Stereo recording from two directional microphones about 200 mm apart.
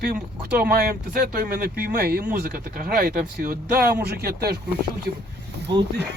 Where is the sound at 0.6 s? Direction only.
50° right (ahead or behind).